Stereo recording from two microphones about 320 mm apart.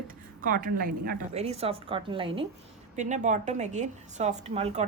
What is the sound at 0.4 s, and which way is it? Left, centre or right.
A woman's voice, right.